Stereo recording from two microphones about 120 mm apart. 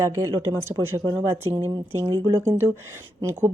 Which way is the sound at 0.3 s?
20° right (ahead or behind).